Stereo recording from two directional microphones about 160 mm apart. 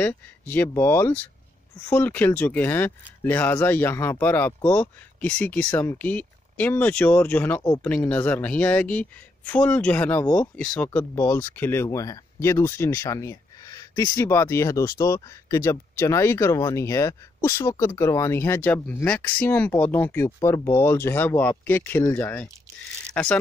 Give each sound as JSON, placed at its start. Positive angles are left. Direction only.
{"t": 0.0, "sound": "speech", "side_deg": 10}